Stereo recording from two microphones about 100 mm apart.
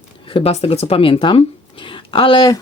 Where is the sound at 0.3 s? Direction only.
75° left (ahead or behind); by 2.4 s 60° left (ahead or behind).